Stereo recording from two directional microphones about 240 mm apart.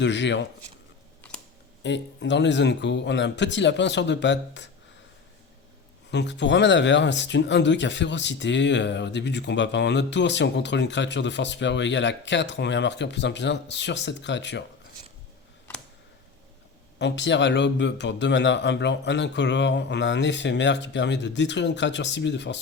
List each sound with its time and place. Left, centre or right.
0.0 s speech: left
1.8 s speech: left
6.1 s speech: left
17.0 s speech: left